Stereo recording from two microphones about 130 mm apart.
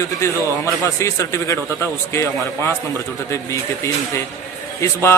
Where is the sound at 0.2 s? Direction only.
25° left (ahead or behind).